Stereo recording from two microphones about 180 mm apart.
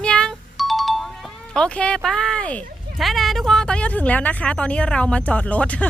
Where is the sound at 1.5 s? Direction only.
5° left (ahead or behind).